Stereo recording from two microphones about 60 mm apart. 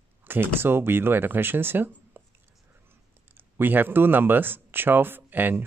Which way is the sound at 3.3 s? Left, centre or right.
Right.